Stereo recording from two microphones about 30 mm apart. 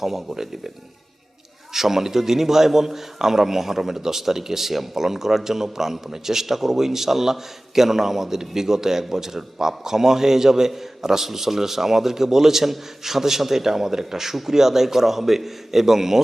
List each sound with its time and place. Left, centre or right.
0.0 s a man's voice: centre
1.7 s a man's voice: centre